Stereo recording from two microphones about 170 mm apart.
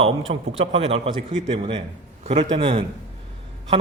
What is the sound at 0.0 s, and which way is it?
Speech, 35° right (ahead or behind).